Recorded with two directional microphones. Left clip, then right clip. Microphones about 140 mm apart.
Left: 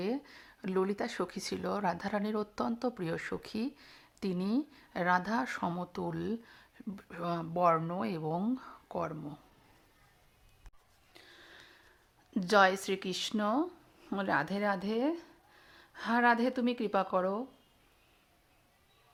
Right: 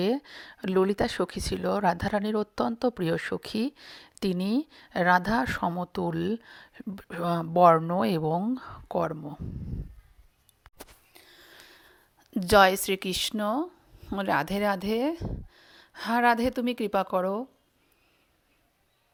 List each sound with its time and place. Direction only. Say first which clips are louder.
0.0 s speech: right 9 dB; 55° right (ahead or behind)
7.8 s speech: right 10 dB; 50° right (ahead or behind)
11.1 s a sound: right 3 dB; 30° right (ahead or behind)
12.4 s speech: right 6 dB; 55° right (ahead or behind)